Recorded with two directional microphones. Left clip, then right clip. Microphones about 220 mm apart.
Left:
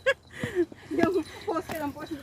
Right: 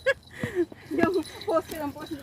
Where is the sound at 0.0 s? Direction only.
5° left (ahead or behind).